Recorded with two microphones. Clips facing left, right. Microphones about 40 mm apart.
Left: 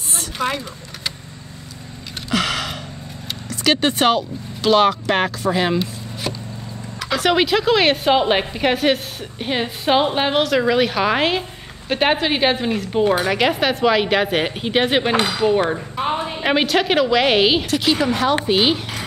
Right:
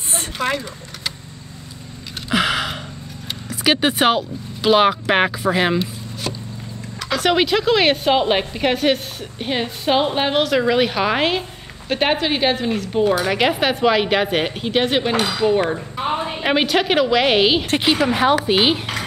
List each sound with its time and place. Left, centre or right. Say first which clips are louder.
0.4 s speech: even; centre
2.2 s gasp: right 2 dB; centre
3.4 s speech: even; centre
6.3 s a sound: left 1 dB; centre
7.0 s a woman's voice: even; centre
13.2 s a woman's voice: even; centre
17.6 s a woman's voice: right 1 dB; right
18.0 s speech: right 2 dB; centre